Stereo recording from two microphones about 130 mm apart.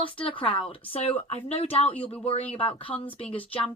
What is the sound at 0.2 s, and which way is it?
Speech, 40° left (ahead or behind).